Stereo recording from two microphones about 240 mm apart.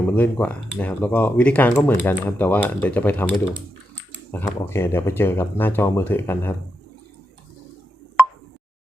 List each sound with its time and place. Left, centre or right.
0.0 s speech: centre